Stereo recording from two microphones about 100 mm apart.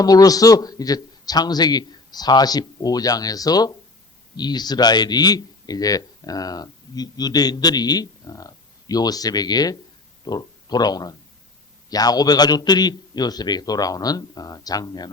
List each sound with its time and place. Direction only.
0.0 s a man's voice: 40° left (ahead or behind)